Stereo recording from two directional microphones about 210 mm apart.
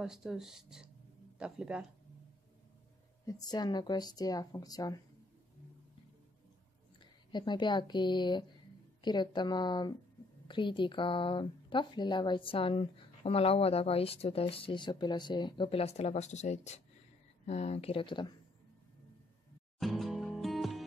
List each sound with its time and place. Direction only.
0.0 s speech: centre (ahead or behind)
3.3 s speech: 20° left (ahead or behind)
7.0 s speech: 20° left (ahead or behind)
19.8 s music: centre (ahead or behind)